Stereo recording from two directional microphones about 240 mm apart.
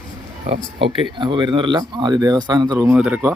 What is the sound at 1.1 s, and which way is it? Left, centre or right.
Speech, centre.